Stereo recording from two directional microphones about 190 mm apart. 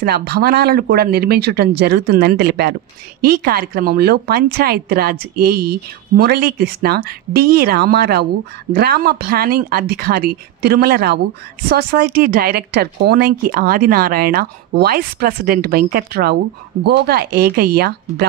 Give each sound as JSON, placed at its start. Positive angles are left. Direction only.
{"t": 0.0, "sound": "speech", "side_deg": -55}